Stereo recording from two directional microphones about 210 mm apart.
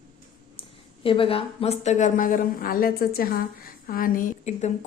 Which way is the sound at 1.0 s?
25° left (ahead or behind).